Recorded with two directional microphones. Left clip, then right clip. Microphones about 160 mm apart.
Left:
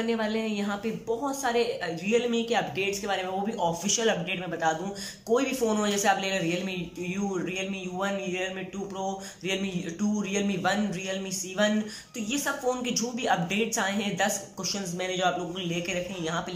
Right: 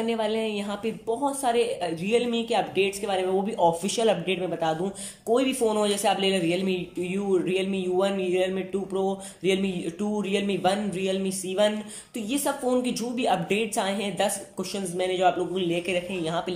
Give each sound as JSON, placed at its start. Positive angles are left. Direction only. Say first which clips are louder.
{"t": 0.0, "sound": "a woman's voice", "louder": "right 3 dB", "side_deg": -20}